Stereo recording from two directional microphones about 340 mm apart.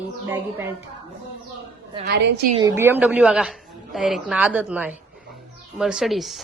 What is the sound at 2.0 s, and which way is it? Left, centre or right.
Speech, right.